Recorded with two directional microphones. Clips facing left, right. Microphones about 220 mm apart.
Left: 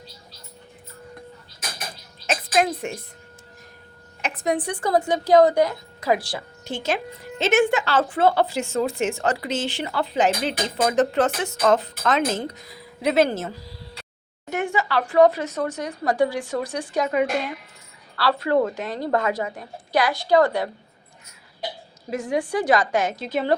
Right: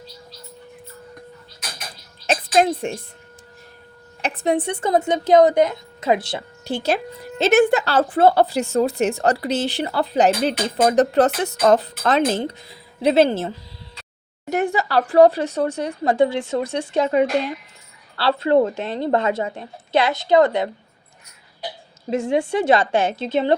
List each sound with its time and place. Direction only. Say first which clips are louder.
2.2 s music: right 4 dB; 30° right (ahead or behind)
4.2 s speech: right 4 dB; 30° right (ahead or behind)
6.7 s a woman's voice: right 4 dB; 35° right (ahead or behind)
14.5 s speech: right 4 dB; 35° right (ahead or behind); by 20.7 s 20° right (ahead or behind)
22.1 s speech: right 4 dB; 25° right (ahead or behind)